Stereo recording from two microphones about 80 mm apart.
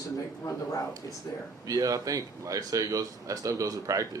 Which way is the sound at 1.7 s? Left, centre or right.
Right.